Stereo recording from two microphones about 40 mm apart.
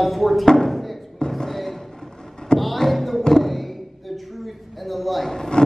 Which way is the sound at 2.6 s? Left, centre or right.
Centre.